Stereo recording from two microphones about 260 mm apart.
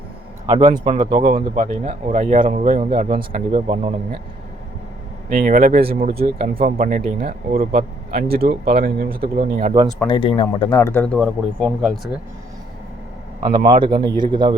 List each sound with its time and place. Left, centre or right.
0.7 s speech: centre
1.2 s speech: right
5.3 s speech: right
10.0 s speech: centre
13.7 s speech: centre